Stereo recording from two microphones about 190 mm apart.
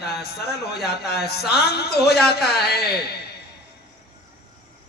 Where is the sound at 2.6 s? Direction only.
55° left (ahead or behind).